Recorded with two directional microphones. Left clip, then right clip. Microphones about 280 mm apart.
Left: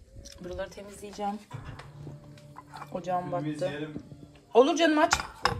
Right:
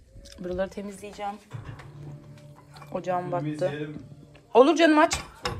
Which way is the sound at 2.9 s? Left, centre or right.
Centre.